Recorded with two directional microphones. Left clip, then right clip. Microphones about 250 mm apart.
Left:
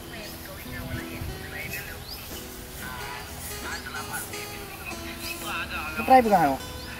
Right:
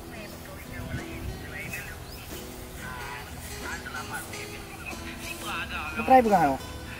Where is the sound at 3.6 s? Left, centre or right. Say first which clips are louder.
Left 1 dB; centre.